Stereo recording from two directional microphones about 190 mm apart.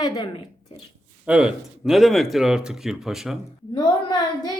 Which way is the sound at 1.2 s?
5° right (ahead or behind).